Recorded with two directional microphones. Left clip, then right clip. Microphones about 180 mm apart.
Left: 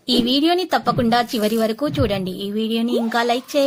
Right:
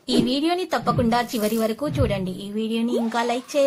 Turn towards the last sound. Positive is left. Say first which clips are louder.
# left 3 dB
turn(degrees=25)  # may be behind; listen again after turning